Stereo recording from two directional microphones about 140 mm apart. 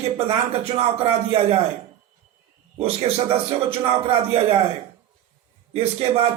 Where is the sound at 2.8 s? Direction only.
45° right (ahead or behind).